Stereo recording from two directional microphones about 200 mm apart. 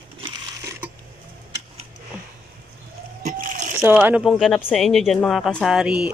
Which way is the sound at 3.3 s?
40° right (ahead or behind).